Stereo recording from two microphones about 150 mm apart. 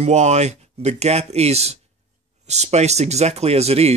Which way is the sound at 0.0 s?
50° right (ahead or behind).